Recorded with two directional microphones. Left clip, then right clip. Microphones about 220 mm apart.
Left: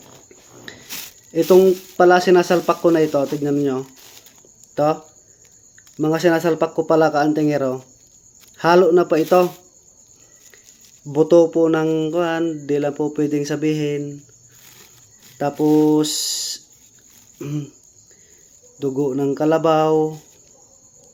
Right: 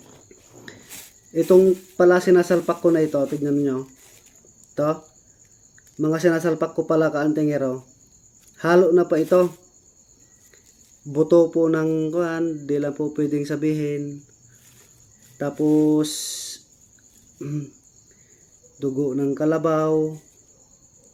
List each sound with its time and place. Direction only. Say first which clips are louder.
0.7 s a sound: left 5 dB; 10° right (ahead or behind)
2.0 s mantra: left 3 dB; 10° right (ahead or behind)
4.7 s speech: left 4 dB; 15° right (ahead or behind)
6.0 s mantra: left 3 dB; 10° right (ahead or behind)
11.1 s mantra: left 3 dB; 15° right (ahead or behind)
15.5 s a sound: left 3 dB; 20° left (ahead or behind)
15.9 s a sound: left 4 dB; 10° right (ahead or behind)
17.4 s mantra: left 3 dB; 10° right (ahead or behind)
18.8 s mantra: left 3 dB; 10° right (ahead or behind)